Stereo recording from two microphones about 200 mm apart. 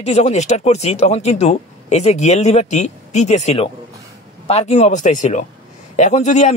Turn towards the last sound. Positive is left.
turn(degrees=35)  # may be behind; listen again after turning